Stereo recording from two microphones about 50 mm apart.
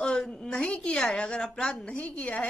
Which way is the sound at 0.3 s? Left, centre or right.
Centre.